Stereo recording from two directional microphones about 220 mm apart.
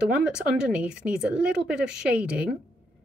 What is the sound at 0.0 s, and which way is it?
Speech, 5° right (ahead or behind).